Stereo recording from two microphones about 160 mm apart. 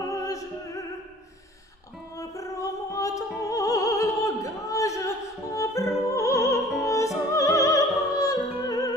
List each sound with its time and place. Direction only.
0.0 s music: 20° left (ahead or behind)
2.1 s opera: 20° left (ahead or behind)